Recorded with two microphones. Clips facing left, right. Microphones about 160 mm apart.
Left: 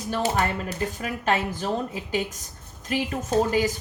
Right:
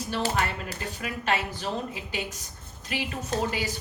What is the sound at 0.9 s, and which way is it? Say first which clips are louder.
A woman's voice: left 1 dB; 45° left (ahead or behind).